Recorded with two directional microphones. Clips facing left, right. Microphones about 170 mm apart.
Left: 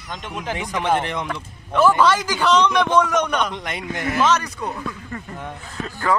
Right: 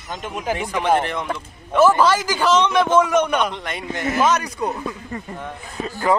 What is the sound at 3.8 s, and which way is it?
Speech, 20° right (ahead or behind).